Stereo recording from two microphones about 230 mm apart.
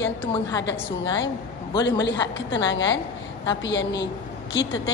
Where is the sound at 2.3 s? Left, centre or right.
Left.